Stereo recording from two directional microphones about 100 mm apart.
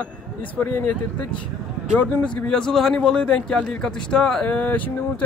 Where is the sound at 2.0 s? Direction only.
15° left (ahead or behind).